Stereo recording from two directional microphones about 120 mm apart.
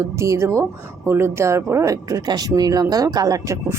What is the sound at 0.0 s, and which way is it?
Speech, 25° right (ahead or behind).